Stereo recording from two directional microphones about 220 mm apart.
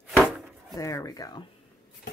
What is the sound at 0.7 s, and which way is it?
Speech, 15° left (ahead or behind).